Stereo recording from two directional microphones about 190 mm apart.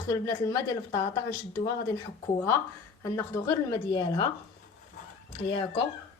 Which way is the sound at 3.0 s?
15° left (ahead or behind).